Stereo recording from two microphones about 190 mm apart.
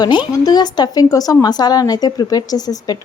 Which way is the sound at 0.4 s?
20° left (ahead or behind).